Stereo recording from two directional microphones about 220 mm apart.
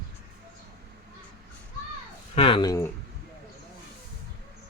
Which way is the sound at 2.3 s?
25° left (ahead or behind).